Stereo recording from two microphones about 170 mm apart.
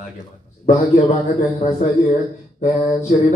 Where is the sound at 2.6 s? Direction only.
40° left (ahead or behind).